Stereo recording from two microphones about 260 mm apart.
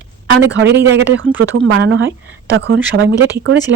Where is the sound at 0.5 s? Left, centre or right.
Right.